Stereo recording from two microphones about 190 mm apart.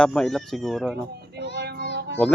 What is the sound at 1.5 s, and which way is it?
Child singing, 55° right (ahead or behind).